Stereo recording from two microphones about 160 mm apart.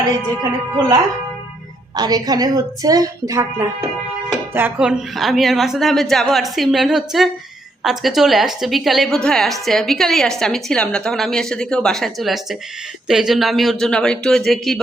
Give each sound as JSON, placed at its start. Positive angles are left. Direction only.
{"t": 0.8, "sound": "a woman's voice", "side_deg": -25}
{"t": 2.0, "sound": "a woman's voice", "side_deg": -25}